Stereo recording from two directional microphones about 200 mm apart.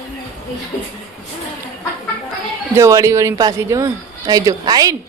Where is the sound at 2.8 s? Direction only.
15° right (ahead or behind).